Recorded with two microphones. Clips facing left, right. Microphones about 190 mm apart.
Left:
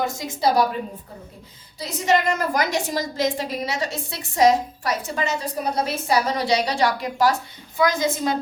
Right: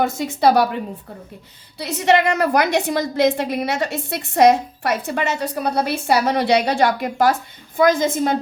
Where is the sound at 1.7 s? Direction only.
70° right (ahead or behind).